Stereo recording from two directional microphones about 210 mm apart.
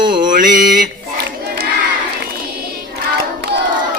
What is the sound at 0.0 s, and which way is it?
Mantra, 20° right (ahead or behind).